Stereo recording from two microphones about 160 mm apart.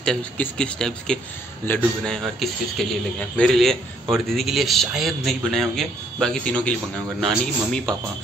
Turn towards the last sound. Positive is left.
turn(degrees=0)  # may be behind; listen again after turning